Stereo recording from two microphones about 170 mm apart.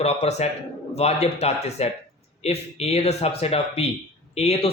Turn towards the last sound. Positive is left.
turn(degrees=40)  # may be behind; listen again after turning